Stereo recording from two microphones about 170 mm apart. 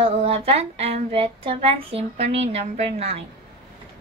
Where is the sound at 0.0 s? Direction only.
35° right (ahead or behind).